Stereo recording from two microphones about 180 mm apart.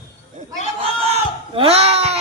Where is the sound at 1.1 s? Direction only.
35° right (ahead or behind).